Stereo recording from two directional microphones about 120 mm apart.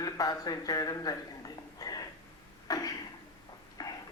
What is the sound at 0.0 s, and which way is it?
Speech, 30° left (ahead or behind).